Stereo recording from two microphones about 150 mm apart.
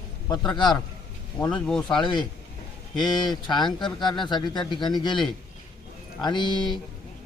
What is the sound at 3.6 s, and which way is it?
Speech, centre (ahead or behind).